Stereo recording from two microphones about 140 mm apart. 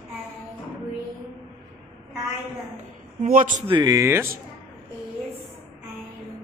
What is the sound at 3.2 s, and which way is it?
Speech, 70° right (ahead or behind).